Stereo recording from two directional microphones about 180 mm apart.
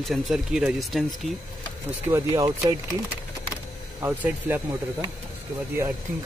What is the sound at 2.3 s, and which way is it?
Speech, 25° right (ahead or behind).